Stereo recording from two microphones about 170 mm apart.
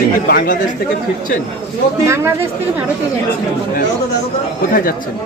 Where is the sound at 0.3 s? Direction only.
55° left (ahead or behind).